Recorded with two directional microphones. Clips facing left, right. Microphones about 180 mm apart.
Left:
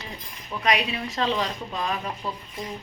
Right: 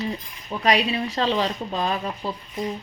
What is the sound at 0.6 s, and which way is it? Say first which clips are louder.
Speech: right 4 dB; 35° right (ahead or behind).